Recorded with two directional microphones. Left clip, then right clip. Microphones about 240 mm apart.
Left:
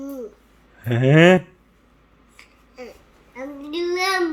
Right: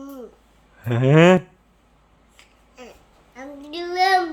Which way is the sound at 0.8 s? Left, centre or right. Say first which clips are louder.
Left 1 dB; centre.